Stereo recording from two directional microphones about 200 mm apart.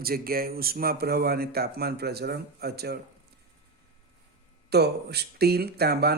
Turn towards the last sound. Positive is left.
turn(degrees=-50)  # may be behind; listen again after turning